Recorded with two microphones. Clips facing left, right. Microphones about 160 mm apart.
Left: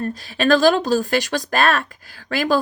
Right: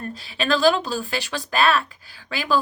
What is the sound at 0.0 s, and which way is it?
Speech, 45° left (ahead or behind).